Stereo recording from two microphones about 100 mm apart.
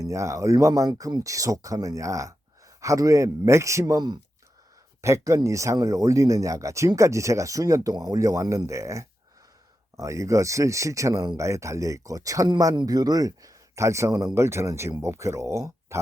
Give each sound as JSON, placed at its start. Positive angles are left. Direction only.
{"t": 0.0, "sound": "speech", "side_deg": -30}
{"t": 4.9, "sound": "speech", "side_deg": -30}